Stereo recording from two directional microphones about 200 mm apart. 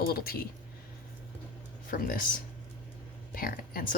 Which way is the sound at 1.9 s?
45° left (ahead or behind).